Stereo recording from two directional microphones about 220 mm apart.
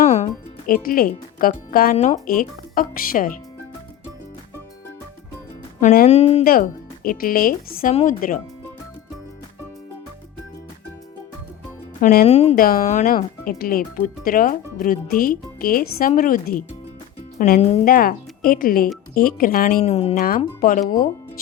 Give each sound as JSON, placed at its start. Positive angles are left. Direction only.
{"t": 0.0, "sound": "music", "side_deg": 30}
{"t": 0.7, "sound": "speech", "side_deg": 40}
{"t": 5.8, "sound": "speech", "side_deg": 45}
{"t": 6.1, "sound": "speech", "side_deg": 30}
{"t": 6.4, "sound": "speech", "side_deg": 40}
{"t": 11.9, "sound": "speech", "side_deg": 35}
{"t": 12.5, "sound": "speech", "side_deg": 40}
{"t": 17.6, "sound": "speech", "side_deg": 30}
{"t": 17.8, "sound": "speech", "side_deg": 40}